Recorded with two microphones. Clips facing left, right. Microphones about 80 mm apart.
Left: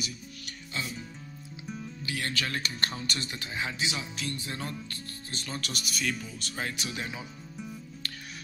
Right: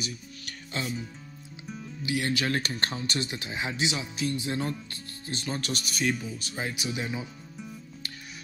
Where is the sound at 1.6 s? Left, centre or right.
Centre.